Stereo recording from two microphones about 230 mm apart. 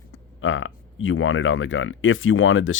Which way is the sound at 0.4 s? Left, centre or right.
Left.